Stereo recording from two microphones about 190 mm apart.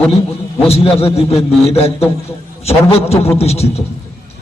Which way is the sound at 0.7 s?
30° left (ahead or behind).